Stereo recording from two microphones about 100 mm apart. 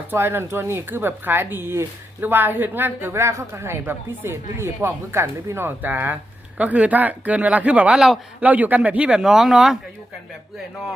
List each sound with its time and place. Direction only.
0.1 s a woman's voice: 25° right (ahead or behind); by 8.2 s 5° right (ahead or behind)
8.4 s speech: 15° right (ahead or behind)